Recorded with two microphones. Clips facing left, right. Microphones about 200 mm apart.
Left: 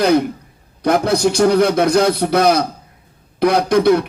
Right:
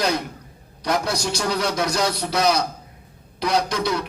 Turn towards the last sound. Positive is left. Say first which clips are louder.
# left 9 dB
turn(degrees=55)  # may be behind; listen again after turning